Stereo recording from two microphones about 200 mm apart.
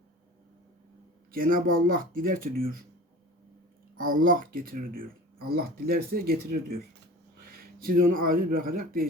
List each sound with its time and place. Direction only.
1.3 s speech: 45° right (ahead or behind)
3.9 s speech: 45° right (ahead or behind)